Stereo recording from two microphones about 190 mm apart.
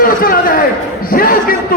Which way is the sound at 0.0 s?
50° left (ahead or behind).